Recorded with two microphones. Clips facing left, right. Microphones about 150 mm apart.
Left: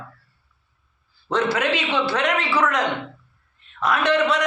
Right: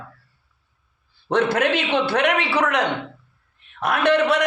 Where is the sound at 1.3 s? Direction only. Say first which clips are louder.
Right 2 dB; 55° right (ahead or behind).